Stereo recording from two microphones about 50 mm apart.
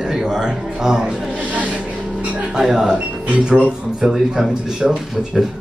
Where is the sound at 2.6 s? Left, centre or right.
Centre.